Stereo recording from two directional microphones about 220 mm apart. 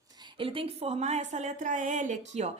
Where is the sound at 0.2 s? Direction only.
20° right (ahead or behind).